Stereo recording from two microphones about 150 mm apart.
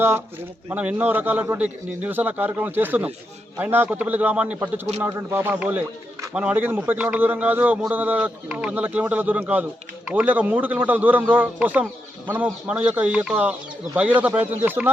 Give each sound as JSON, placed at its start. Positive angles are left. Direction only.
{"t": 0.7, "sound": "speech", "side_deg": -10}